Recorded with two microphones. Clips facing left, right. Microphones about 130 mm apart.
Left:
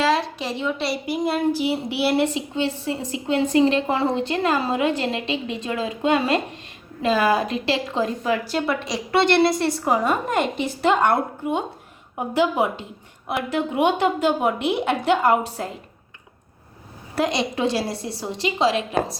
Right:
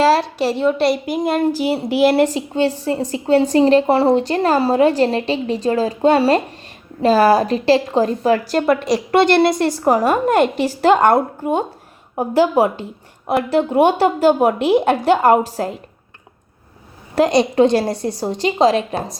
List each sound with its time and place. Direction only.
0.1 s a woman's voice: 65° right (ahead or behind)
1.1 s a woman's voice: 45° right (ahead or behind)
8.5 s a woman's voice: 55° right (ahead or behind)
10.2 s a woman's voice: 80° right
10.8 s a woman's voice: 40° right (ahead or behind)
17.2 s a woman's voice: 45° right (ahead or behind)